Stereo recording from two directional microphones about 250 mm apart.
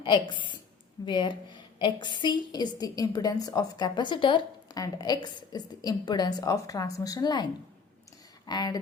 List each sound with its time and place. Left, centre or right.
0.0 s a woman's voice: centre
8.4 s a woman's voice: centre